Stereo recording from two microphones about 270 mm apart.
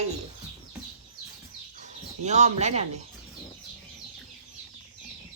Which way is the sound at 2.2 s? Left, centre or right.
Right.